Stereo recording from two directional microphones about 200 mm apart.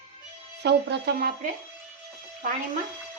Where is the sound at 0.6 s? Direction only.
55° right (ahead or behind).